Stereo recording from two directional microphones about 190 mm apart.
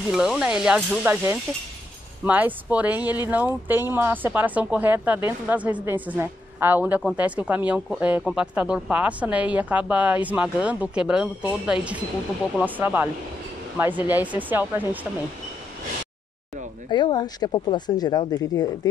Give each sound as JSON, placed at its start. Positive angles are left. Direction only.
{"t": 0.1, "sound": "speech", "side_deg": 0}
{"t": 16.9, "sound": "speech", "side_deg": 25}